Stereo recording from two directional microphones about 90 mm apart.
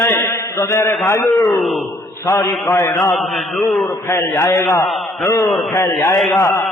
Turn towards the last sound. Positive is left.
turn(degrees=35)  # may be behind; listen again after turning